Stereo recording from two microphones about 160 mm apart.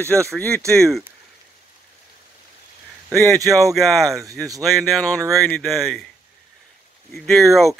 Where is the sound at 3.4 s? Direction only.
20° right (ahead or behind).